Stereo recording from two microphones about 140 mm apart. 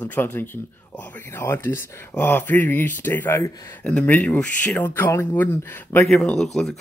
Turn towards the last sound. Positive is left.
turn(degrees=0)  # may be behind; listen again after turning